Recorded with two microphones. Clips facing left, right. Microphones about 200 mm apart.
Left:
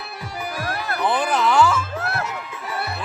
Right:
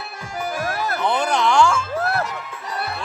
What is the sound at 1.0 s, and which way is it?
Music, 5° left (ahead or behind).